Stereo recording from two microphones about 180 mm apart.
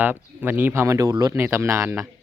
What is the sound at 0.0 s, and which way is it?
Speech, 10° right (ahead or behind).